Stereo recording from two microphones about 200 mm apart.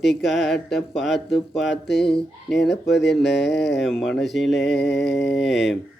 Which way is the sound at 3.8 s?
Centre (ahead or behind).